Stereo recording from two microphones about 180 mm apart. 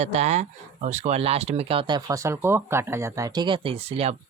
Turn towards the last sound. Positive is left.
turn(degrees=-35)  # may be behind; listen again after turning